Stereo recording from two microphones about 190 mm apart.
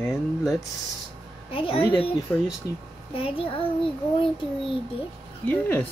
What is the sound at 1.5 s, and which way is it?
Speech, 30° left (ahead or behind).